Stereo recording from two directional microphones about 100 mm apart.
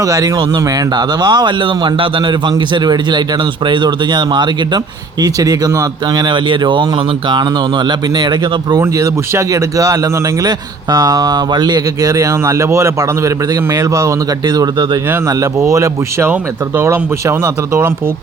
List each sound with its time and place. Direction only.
0.0 s speech: 35° right (ahead or behind)
5.2 s speech: 40° right (ahead or behind)
8.8 s speech: 30° right (ahead or behind)